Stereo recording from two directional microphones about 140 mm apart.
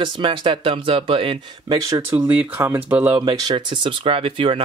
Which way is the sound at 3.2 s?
35° right (ahead or behind).